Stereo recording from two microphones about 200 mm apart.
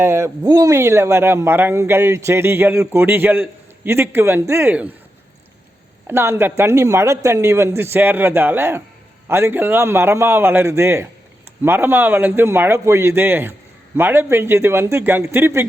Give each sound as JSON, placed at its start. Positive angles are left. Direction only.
{"t": 0.0, "sound": "speech", "side_deg": -15}
{"t": 6.1, "sound": "speech", "side_deg": -10}